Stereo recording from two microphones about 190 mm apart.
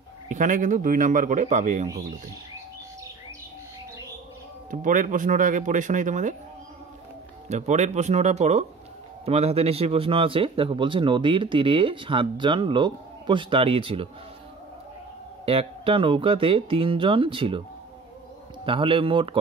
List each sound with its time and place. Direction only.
0.3 s speech: 40° right (ahead or behind)
4.6 s speech: 45° right (ahead or behind)
7.4 s a man's voice: 35° right (ahead or behind)
15.4 s a man's voice: 30° right (ahead or behind)
18.7 s a man's voice: 30° right (ahead or behind)